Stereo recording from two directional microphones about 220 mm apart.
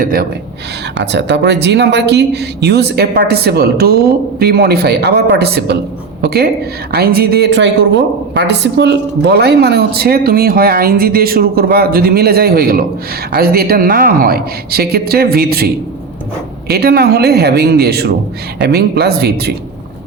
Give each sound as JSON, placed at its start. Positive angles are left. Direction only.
{"t": 0.0, "sound": "a woman's voice", "side_deg": -40}